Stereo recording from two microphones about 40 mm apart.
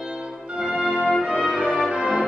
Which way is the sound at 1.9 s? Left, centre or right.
Centre.